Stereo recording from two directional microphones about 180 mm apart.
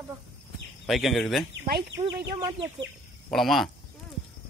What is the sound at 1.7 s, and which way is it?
Speech, 60° right (ahead or behind).